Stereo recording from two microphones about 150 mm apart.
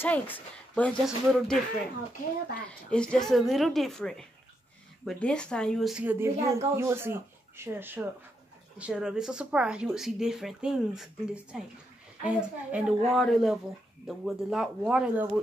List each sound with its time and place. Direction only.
0.0 s a woman's voice: 10° left (ahead or behind)
2.9 s speech: 5° left (ahead or behind)
6.0 s speech: 15° right (ahead or behind)